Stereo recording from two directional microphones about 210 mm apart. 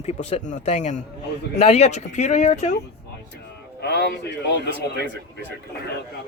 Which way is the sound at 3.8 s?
50° left (ahead or behind).